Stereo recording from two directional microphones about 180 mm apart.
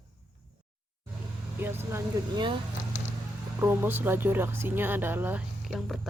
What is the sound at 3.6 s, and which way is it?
Speech, 10° right (ahead or behind).